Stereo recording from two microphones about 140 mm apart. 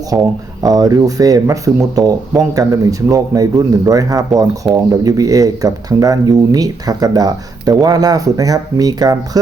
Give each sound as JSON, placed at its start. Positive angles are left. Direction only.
{"t": 0.1, "sound": "speech", "side_deg": -15}
{"t": 0.6, "sound": "speech", "side_deg": -25}